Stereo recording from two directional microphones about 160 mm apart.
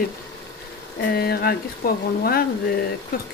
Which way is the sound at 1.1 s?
75° left (ahead or behind).